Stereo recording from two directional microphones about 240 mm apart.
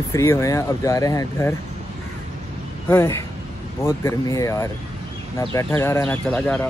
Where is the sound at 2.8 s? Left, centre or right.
Centre.